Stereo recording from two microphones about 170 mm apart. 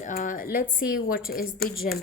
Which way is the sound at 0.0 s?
50° left (ahead or behind).